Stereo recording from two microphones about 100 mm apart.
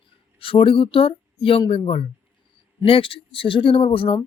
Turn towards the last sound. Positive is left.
turn(degrees=60)  # may be behind; listen again after turning